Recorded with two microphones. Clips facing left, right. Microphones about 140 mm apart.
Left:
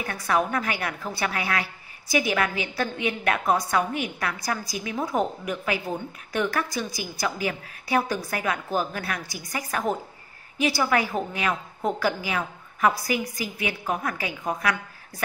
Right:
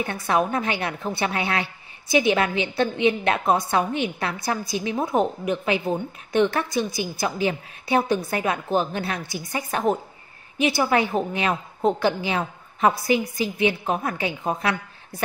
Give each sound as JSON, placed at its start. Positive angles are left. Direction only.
{"t": 0.0, "sound": "a woman's voice", "side_deg": -25}